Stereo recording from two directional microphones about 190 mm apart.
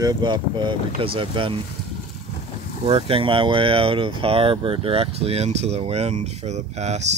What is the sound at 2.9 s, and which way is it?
Speech, 30° right (ahead or behind).